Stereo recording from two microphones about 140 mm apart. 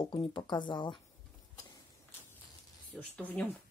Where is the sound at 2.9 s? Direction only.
10° left (ahead or behind).